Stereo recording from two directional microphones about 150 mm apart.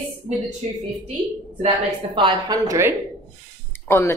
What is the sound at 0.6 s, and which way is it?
Speech, 50° right (ahead or behind).